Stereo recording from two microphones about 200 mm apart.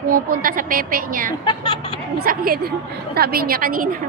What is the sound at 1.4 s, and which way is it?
Speech, 25° left (ahead or behind).